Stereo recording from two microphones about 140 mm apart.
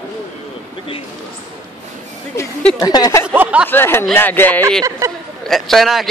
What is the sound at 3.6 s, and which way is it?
Speech, 15° left (ahead or behind).